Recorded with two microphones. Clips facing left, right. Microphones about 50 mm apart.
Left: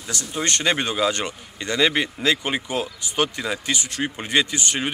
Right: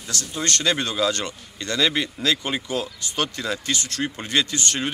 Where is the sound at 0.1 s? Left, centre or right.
Centre.